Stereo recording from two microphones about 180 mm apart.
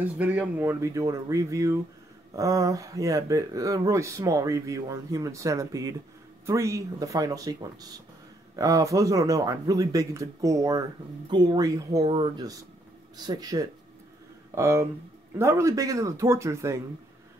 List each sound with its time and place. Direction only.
0.2 s speech: 5° right (ahead or behind)